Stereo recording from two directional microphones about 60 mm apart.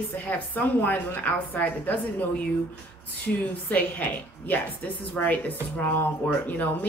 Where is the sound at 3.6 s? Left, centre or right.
Left.